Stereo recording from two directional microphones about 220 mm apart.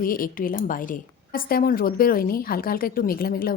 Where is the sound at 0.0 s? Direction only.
40° left (ahead or behind).